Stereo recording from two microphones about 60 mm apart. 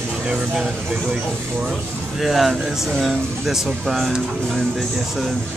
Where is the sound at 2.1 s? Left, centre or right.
Centre.